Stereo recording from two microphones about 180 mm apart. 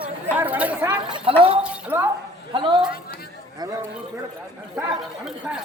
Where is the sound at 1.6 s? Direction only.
15° right (ahead or behind).